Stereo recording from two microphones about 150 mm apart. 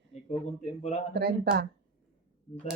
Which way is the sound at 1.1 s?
90° right.